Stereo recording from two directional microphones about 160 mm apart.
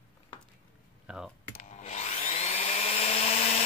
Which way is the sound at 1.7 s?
45° left (ahead or behind).